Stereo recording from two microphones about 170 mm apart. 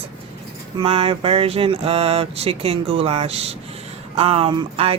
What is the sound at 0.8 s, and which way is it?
A woman's voice, 35° right (ahead or behind).